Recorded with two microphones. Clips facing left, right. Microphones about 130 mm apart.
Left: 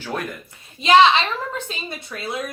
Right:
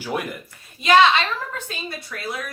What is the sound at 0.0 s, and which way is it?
Speech, 10° right (ahead or behind).